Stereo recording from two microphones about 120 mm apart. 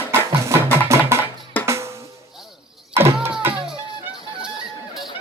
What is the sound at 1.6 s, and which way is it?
Drum, 25° right (ahead or behind).